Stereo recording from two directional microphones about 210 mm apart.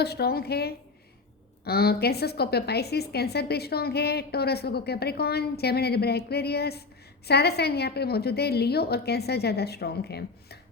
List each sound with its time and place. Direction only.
0.0 s a woman's voice: 50° left (ahead or behind)